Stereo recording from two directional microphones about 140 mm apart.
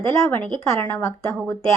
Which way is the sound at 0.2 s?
15° left (ahead or behind).